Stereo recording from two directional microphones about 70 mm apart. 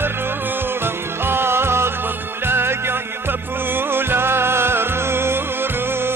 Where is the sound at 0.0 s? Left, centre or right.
Right.